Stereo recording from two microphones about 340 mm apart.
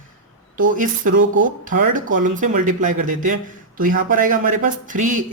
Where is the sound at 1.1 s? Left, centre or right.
Right.